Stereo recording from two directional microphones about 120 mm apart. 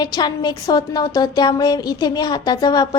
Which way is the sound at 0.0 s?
35° left (ahead or behind).